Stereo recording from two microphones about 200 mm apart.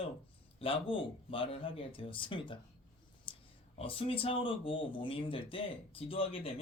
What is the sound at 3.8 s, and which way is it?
Speech, 30° left (ahead or behind).